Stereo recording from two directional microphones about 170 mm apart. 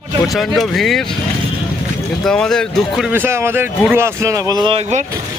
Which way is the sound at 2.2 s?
5° left (ahead or behind).